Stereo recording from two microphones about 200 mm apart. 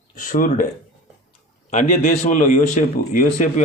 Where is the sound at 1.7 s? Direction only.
40° left (ahead or behind).